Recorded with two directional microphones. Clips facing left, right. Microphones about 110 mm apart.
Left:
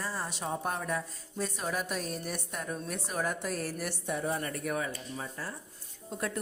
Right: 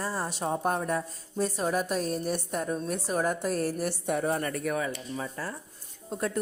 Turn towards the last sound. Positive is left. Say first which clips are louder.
# right 5 dB
turn(degrees=-30)  # may be behind; listen again after turning